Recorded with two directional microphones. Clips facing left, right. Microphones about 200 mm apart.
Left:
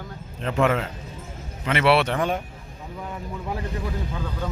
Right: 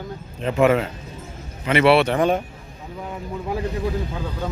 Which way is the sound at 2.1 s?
20° right (ahead or behind).